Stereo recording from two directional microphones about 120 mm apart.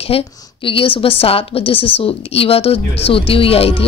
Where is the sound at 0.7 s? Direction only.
50° left (ahead or behind).